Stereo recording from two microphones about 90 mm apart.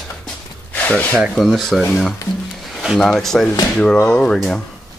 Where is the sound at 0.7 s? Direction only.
15° left (ahead or behind).